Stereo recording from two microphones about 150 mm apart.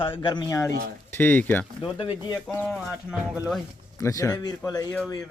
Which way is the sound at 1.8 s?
35° left (ahead or behind).